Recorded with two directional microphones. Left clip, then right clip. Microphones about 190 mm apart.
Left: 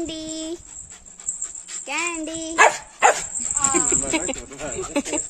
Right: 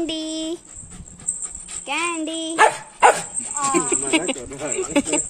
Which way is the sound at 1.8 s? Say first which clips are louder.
Right 2 dB; 10° left (ahead or behind).